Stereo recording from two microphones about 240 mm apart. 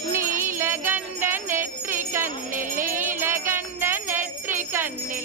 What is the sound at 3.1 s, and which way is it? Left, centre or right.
Jingle bell, centre.